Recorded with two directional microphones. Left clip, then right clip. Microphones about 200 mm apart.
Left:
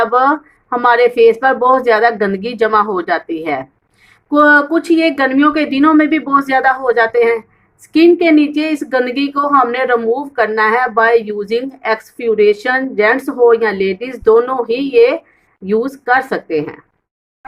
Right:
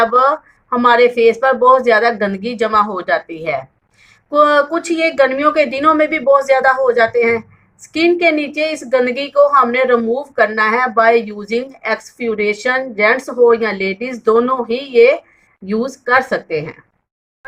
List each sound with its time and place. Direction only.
0.1 s speech: 45° left (ahead or behind)